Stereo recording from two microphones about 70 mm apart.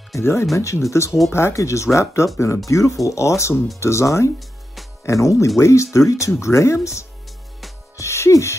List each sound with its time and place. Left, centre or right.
0.2 s speech: left
8.0 s music: left